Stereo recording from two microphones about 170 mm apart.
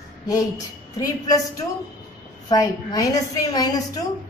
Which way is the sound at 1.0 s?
20° left (ahead or behind).